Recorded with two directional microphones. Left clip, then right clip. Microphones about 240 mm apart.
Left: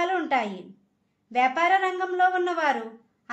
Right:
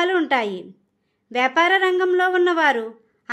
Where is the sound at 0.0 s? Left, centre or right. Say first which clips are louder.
Right 5 dB; right.